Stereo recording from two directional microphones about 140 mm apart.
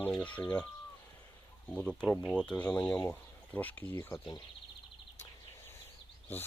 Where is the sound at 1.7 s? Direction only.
5° left (ahead or behind).